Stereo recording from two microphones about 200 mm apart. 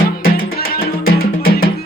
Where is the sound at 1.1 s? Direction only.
50° left (ahead or behind).